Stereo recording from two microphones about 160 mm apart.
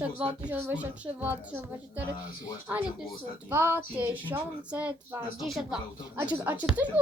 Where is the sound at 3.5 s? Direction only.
15° right (ahead or behind).